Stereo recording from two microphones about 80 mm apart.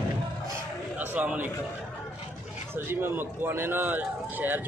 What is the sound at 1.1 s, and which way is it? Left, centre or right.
Speech, centre.